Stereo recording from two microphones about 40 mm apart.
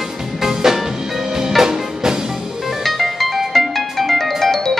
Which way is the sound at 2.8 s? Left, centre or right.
Centre.